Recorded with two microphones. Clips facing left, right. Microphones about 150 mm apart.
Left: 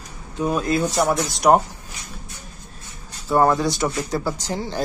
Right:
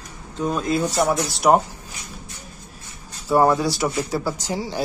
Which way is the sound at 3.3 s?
10° right (ahead or behind).